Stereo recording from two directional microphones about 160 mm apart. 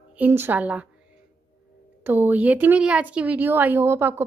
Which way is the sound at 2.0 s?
10° right (ahead or behind).